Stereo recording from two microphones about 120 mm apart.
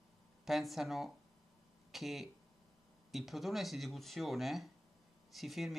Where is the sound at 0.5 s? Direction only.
Centre (ahead or behind).